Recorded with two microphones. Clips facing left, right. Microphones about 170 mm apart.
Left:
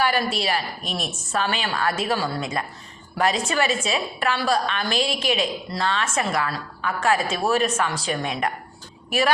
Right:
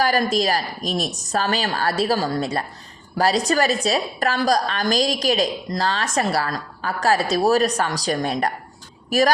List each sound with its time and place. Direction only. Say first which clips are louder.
0.0 s a woman's voice: right 3 dB; 40° right (ahead or behind)